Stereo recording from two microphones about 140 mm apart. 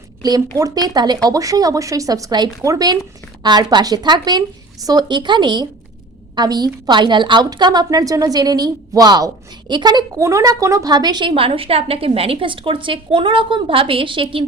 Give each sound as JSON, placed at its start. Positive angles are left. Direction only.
{"t": 0.2, "sound": "a woman's voice", "side_deg": -25}